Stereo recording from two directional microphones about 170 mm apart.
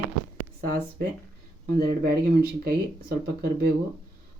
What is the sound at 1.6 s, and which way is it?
Speech, 65° right (ahead or behind).